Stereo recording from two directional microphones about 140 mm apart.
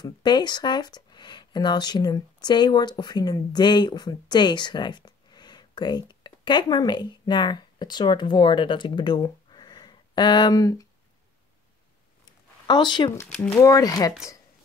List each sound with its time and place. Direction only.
0.0 s speech: 30° left (ahead or behind)
12.6 s speech: 30° left (ahead or behind)